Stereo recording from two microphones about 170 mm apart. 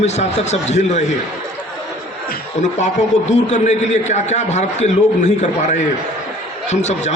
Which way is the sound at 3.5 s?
45° left (ahead or behind).